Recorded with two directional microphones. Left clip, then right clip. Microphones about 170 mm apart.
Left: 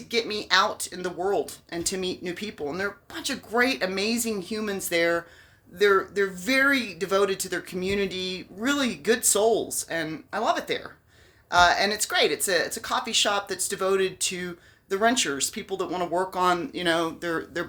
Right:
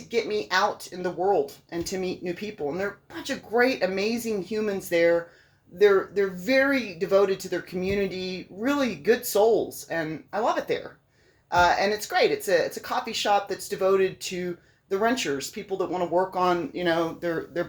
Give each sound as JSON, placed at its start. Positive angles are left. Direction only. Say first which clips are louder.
{"t": 0.1, "sound": "speech", "louder": "left 1 dB", "side_deg": 20}